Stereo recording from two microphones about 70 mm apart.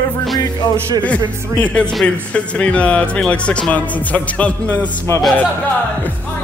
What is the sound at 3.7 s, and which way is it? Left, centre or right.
Music, left.